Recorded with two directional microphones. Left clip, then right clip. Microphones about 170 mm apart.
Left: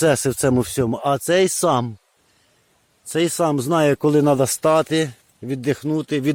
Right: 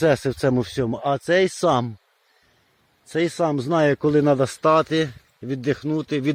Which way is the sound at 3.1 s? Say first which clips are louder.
Left 2 dB; 15° left (ahead or behind).